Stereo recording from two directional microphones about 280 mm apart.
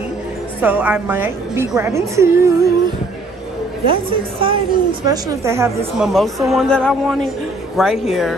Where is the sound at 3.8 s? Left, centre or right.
Centre.